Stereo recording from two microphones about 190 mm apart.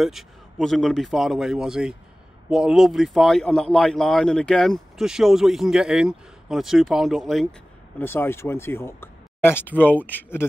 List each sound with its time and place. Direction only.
0.0 s speech: centre (ahead or behind)
8.0 s speech: 10° left (ahead or behind)